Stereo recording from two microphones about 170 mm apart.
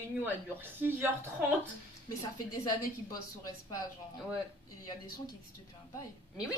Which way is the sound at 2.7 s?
20° left (ahead or behind).